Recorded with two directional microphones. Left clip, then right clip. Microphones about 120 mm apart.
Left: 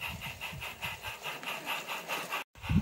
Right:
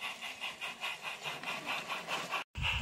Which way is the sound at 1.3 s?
40° left (ahead or behind).